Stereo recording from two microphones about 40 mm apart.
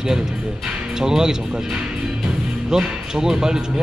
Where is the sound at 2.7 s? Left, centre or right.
Centre.